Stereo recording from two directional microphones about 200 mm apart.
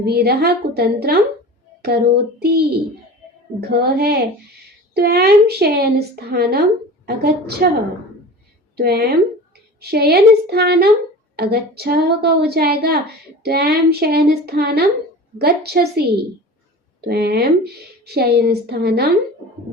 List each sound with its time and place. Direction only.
0.0 s a woman's voice: 50° right (ahead or behind)
8.7 s a woman's voice: 55° right (ahead or behind)
17.1 s a woman's voice: 55° right (ahead or behind)